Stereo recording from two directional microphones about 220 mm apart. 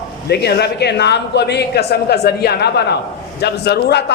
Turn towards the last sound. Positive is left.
turn(degrees=50)  # may be behind; listen again after turning